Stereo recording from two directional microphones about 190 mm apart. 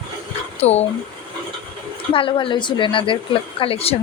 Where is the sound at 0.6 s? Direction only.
35° left (ahead or behind).